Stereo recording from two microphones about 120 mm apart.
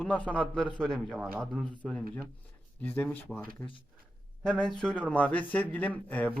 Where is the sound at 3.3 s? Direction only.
Centre (ahead or behind).